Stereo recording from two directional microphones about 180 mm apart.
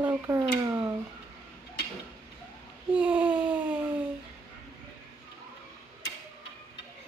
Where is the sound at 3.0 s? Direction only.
5° right (ahead or behind).